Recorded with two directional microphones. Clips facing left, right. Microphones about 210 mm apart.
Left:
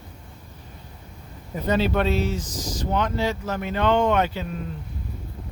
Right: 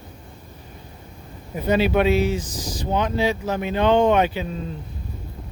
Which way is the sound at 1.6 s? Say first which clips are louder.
Right 3 dB; 10° right (ahead or behind).